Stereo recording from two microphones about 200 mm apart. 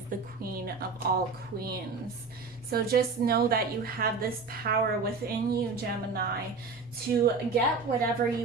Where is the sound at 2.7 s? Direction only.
50° right (ahead or behind).